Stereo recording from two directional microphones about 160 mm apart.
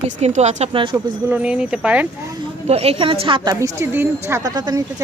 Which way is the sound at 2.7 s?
40° right (ahead or behind).